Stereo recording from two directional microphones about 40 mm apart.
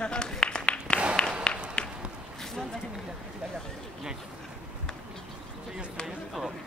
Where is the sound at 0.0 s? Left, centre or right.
Left.